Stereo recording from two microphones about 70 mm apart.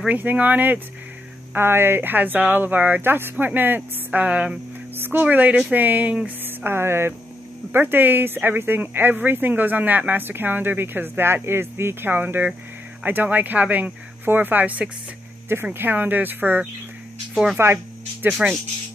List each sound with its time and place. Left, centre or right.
0.1 s speech: right
1.5 s speech: right; by 4.6 s centre
4.9 s speech: right
6.2 s a sound: right
7.7 s speech: right
15.4 s speech: right
17.3 s speech: centre
18.2 s speech: right